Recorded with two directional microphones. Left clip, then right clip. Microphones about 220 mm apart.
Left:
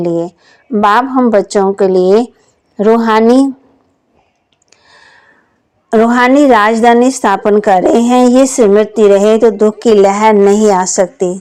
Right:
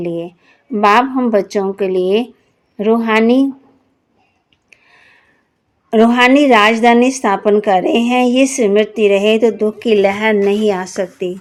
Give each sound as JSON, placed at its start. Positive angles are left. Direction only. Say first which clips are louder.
{"t": 0.0, "sound": "speech", "louder": "left 7 dB", "side_deg": 25}
{"t": 4.7, "sound": "a sound", "louder": "right 1 dB", "side_deg": 30}
{"t": 6.0, "sound": "speech", "louder": "left 2 dB", "side_deg": 30}